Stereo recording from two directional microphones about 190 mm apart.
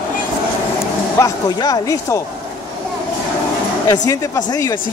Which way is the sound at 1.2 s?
20° left (ahead or behind).